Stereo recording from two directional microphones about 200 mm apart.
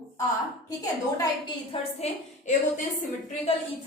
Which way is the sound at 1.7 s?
30° left (ahead or behind).